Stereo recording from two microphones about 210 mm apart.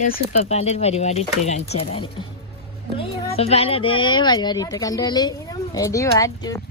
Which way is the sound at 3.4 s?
30° left (ahead or behind).